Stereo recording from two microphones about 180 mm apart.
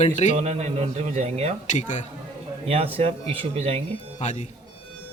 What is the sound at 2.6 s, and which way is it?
A man's voice, 35° right (ahead or behind).